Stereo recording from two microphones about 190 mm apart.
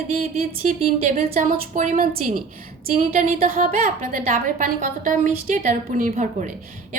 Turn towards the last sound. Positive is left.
turn(degrees=-40)  # may be behind; listen again after turning